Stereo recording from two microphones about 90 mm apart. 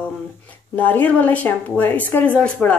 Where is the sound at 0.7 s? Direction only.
20° left (ahead or behind).